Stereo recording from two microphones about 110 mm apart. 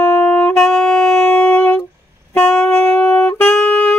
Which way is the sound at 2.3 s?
10° left (ahead or behind).